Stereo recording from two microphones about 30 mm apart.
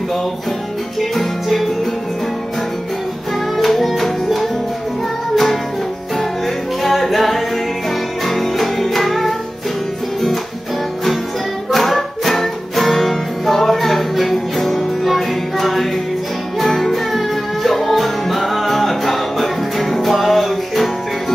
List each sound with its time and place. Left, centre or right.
3.5 s music: centre
11.7 s music: centre